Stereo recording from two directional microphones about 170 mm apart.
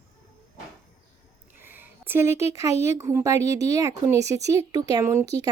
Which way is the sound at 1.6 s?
10° right (ahead or behind).